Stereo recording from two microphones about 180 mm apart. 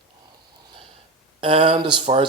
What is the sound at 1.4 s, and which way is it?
Speech, 30° right (ahead or behind).